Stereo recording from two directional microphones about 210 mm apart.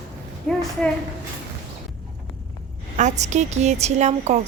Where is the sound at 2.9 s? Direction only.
35° right (ahead or behind).